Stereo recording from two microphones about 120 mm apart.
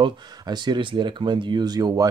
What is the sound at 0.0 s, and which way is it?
Speech, 35° right (ahead or behind).